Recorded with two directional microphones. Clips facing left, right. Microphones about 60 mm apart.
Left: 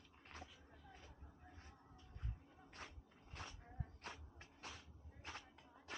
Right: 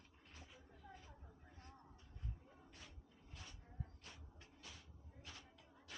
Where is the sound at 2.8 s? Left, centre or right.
Left.